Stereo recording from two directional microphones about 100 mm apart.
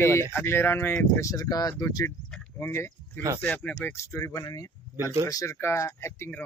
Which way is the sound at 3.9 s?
30° left (ahead or behind).